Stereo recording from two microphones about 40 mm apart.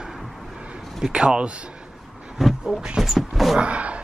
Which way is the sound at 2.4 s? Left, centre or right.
Centre.